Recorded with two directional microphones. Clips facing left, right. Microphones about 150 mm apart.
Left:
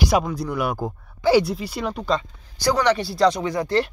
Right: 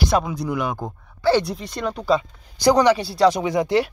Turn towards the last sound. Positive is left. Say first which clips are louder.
# right 2 dB
turn(degrees=-15)  # may be behind; listen again after turning